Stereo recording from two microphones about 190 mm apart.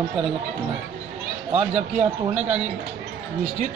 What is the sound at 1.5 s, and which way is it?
A man's voice, 35° right (ahead or behind).